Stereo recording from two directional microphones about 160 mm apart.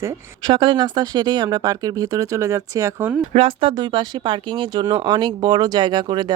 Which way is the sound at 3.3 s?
35° right (ahead or behind).